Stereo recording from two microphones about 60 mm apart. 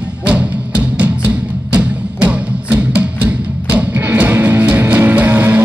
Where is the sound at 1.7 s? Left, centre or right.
Right.